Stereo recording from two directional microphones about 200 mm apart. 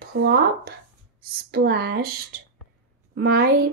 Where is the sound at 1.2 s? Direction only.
50° right (ahead or behind).